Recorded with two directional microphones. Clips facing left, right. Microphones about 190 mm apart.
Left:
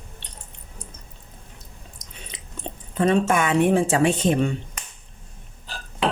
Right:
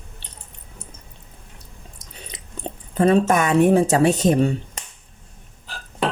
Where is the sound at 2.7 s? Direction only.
40° right (ahead or behind).